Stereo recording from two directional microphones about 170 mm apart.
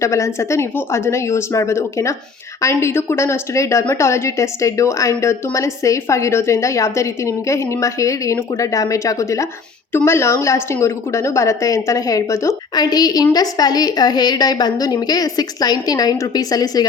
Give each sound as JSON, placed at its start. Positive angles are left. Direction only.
{"t": 0.0, "sound": "a woman's voice", "side_deg": 15}